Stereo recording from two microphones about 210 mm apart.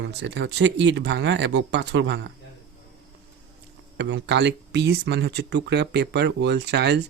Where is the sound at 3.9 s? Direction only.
55° right (ahead or behind).